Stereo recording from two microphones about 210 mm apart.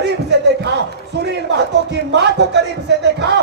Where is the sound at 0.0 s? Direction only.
50° right (ahead or behind).